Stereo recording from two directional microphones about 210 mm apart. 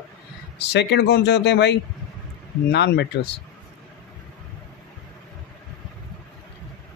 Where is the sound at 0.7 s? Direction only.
55° left (ahead or behind).